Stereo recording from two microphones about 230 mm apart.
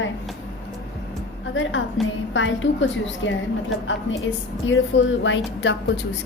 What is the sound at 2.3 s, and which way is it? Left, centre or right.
A woman's voice, left.